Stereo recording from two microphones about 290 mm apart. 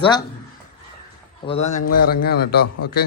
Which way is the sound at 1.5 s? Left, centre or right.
Left.